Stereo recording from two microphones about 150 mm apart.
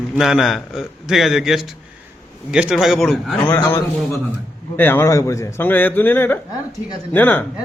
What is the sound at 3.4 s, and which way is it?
A man's voice, 15° left (ahead or behind).